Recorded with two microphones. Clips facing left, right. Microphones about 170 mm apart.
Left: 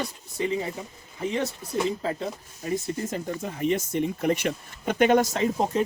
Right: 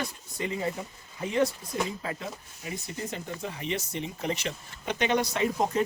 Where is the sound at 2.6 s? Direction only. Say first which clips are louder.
Left 7 dB; 45° left (ahead or behind).